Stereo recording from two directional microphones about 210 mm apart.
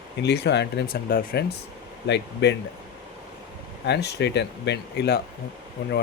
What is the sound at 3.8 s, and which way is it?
Speech, 55° left (ahead or behind).